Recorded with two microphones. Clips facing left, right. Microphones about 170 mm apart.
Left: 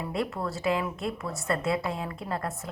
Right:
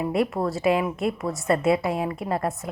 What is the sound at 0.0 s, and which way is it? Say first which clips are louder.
A woman's voice: right 7 dB; 20° right (ahead or behind).